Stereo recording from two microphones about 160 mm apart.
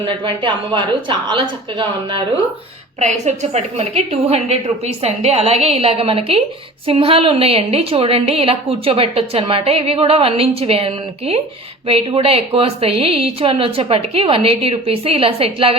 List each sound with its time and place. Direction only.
0.0 s a woman's voice: 30° right (ahead or behind)
3.0 s a woman's voice: 45° right (ahead or behind)